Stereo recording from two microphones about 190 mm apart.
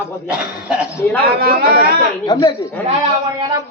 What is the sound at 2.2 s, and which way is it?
Speech, 25° left (ahead or behind).